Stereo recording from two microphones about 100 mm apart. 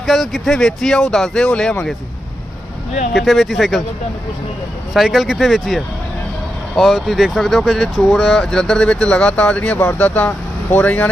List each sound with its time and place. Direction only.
0.0 s speech: centre (ahead or behind)
3.1 s speech: centre (ahead or behind)
4.9 s speech: centre (ahead or behind); by 11.1 s 15° left (ahead or behind)